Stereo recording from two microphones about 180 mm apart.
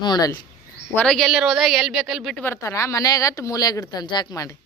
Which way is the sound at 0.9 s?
5° left (ahead or behind).